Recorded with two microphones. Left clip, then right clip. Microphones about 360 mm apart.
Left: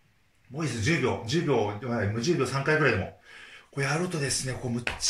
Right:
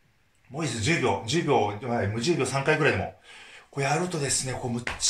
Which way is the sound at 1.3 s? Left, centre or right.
Centre.